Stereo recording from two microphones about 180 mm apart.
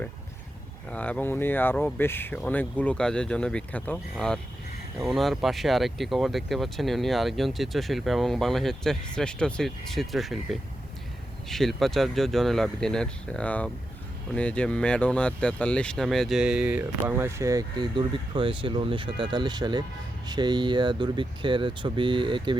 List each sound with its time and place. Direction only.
0.9 s speech: 5° left (ahead or behind); by 22.5 s 25° right (ahead or behind)